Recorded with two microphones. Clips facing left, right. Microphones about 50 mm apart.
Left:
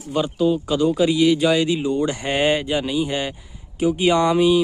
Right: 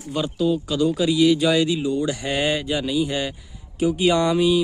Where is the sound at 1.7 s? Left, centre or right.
Left; by 4.6 s centre.